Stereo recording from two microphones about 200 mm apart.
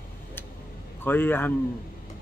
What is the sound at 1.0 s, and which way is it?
Speech, 10° left (ahead or behind).